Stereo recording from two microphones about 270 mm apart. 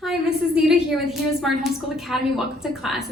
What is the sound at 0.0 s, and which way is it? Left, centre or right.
A woman's voice, centre.